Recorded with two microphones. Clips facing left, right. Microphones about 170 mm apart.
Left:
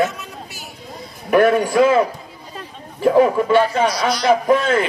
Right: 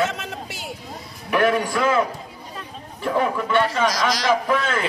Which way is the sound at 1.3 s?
40° left (ahead or behind).